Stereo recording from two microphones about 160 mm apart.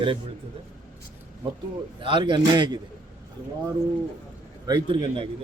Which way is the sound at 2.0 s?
30° right (ahead or behind).